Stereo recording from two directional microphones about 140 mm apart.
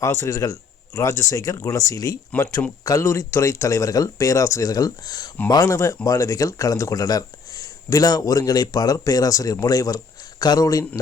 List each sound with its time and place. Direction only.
0.0 s speech: 20° left (ahead or behind)